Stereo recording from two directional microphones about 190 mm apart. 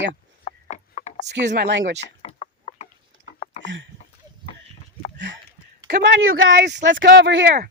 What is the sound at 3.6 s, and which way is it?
Speech, 70° right (ahead or behind).